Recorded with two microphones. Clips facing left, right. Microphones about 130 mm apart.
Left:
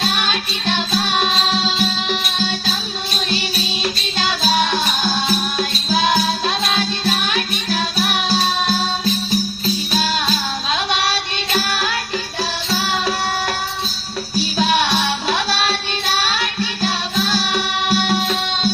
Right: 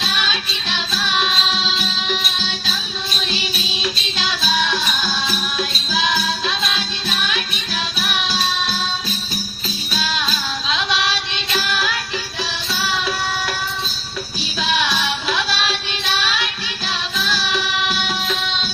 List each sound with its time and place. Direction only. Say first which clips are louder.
0.0 s music: left 3 dB; 45° left (ahead or behind)
9.9 s music: left 1 dB; 45° left (ahead or behind)